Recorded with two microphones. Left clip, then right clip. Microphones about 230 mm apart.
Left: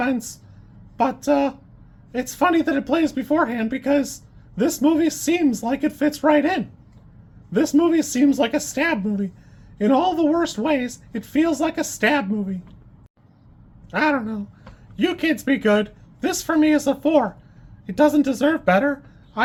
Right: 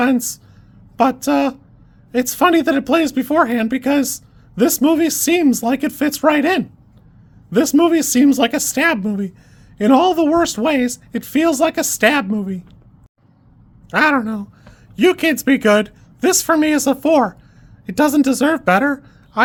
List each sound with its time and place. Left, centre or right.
0.0 s speech: right
13.9 s speech: right